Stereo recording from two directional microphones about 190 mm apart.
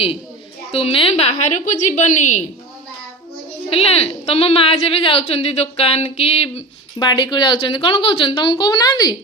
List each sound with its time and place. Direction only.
0.7 s a woman's voice: 30° left (ahead or behind)
3.7 s a woman's voice: 30° left (ahead or behind)